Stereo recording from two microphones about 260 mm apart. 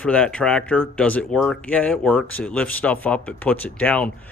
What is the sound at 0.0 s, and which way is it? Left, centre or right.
Speech, centre.